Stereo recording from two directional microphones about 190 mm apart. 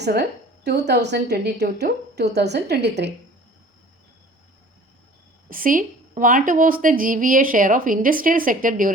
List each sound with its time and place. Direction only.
0.0 s a woman's voice: 60° right (ahead or behind)
5.5 s a woman's voice: 45° right (ahead or behind)